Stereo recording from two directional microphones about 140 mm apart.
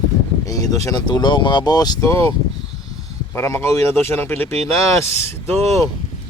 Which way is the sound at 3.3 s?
20° left (ahead or behind).